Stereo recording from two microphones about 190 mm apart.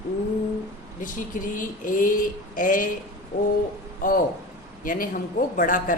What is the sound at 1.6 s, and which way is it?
A woman's voice, 45° left (ahead or behind).